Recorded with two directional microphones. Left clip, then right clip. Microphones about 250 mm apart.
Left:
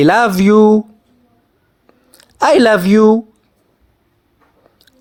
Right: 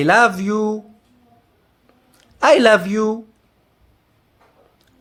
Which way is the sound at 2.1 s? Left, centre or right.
Left.